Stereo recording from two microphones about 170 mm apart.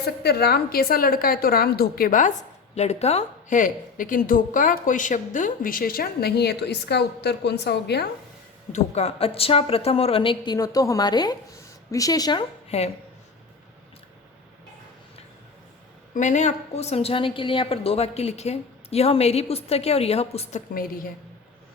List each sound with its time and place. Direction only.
0.0 s a woman's voice: 75° left (ahead or behind); by 2.3 s 55° left (ahead or behind)
2.7 s a woman's voice: 40° left (ahead or behind); by 8.0 s 75° left (ahead or behind)
8.7 s a woman's voice: 35° left (ahead or behind)
16.1 s a woman's voice: 45° left (ahead or behind)